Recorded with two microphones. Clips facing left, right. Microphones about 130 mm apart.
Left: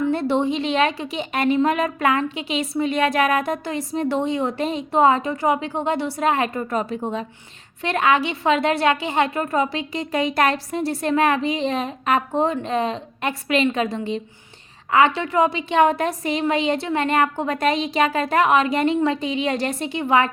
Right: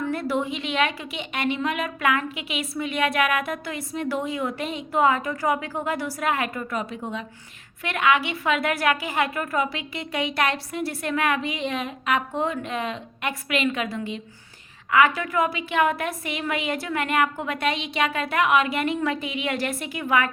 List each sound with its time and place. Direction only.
0.1 s a woman's voice: 30° left (ahead or behind)